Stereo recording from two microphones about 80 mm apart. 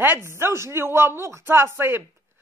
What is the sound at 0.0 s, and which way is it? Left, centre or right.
A man's voice, right.